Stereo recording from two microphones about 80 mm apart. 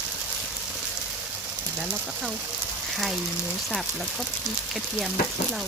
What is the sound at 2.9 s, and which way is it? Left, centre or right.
Speech, centre.